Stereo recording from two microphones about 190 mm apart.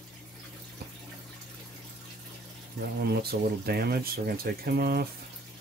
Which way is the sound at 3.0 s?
55° right (ahead or behind).